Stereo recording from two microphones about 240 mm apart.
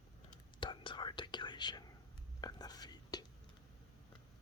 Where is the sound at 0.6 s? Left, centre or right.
Centre.